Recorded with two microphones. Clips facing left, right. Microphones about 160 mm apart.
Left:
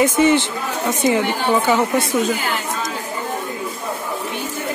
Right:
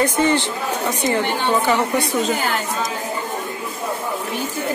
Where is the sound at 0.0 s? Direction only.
15° left (ahead or behind).